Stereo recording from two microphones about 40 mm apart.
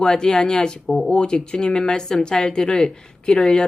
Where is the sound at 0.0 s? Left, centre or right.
Centre.